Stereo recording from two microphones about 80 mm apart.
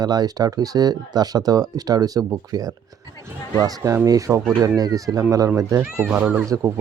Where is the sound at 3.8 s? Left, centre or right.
Right.